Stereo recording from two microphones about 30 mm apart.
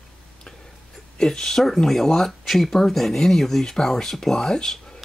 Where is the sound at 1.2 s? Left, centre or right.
Centre.